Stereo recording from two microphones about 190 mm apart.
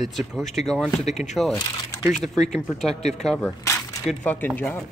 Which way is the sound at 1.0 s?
35° left (ahead or behind).